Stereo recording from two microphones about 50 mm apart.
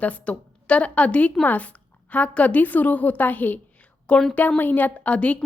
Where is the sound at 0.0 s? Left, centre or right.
Left.